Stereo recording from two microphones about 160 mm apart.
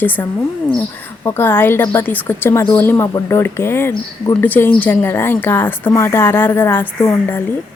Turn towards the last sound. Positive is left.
turn(degrees=15)  # may be behind; listen again after turning